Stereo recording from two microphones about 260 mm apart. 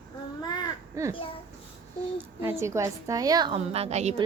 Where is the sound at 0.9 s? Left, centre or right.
Centre.